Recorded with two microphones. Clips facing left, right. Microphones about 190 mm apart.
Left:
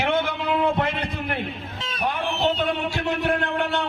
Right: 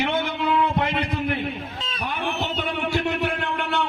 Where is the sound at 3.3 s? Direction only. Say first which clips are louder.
Left 4 dB; 65° left (ahead or behind).